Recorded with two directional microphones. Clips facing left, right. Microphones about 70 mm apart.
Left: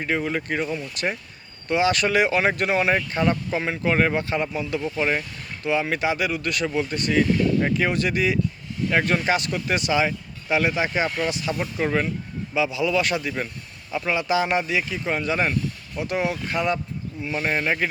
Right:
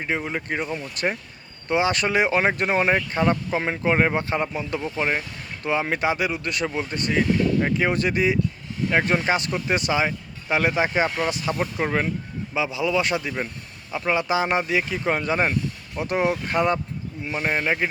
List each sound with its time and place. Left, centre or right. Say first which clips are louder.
0.0 s speech: left 2 dB; centre
8.9 s speech: even; right
17.2 s speech: even; centre